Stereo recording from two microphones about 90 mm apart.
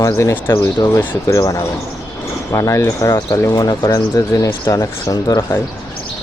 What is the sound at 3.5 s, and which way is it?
Speech, 45° left (ahead or behind).